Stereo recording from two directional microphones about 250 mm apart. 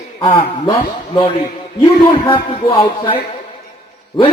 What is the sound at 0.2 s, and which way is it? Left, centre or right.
A man's voice, centre.